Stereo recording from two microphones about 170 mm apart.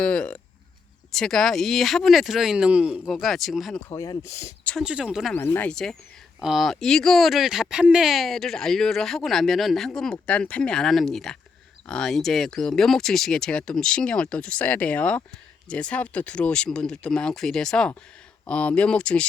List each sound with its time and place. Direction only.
0.0 s speech: 5° left (ahead or behind)
3.8 s speech: 20° left (ahead or behind)
4.8 s speech: 5° right (ahead or behind)
5.4 s speech: 10° left (ahead or behind)